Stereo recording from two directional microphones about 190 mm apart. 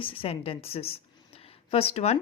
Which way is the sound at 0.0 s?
30° left (ahead or behind).